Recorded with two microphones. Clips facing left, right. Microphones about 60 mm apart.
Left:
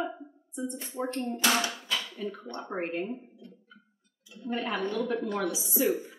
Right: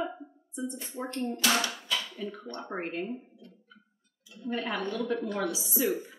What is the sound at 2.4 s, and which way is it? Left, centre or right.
Speech, centre.